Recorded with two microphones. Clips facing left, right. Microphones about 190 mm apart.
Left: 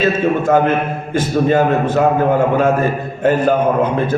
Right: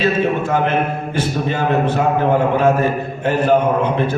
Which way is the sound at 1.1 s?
50° left (ahead or behind).